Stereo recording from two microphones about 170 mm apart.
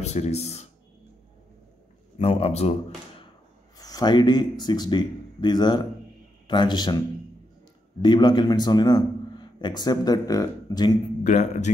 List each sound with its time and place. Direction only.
0.0 s speech: 40° left (ahead or behind)
2.1 s speech: 40° left (ahead or behind)
3.7 s a man's voice: 20° left (ahead or behind)
8.0 s a man's voice: 25° left (ahead or behind)
11.2 s speech: 45° left (ahead or behind)